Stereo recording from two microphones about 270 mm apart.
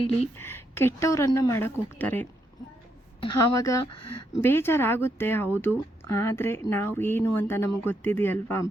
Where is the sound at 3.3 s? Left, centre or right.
Left.